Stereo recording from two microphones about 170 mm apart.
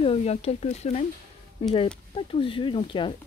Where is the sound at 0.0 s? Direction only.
35° left (ahead or behind).